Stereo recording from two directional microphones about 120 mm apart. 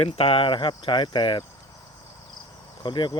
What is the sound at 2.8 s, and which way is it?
Speech, 40° left (ahead or behind).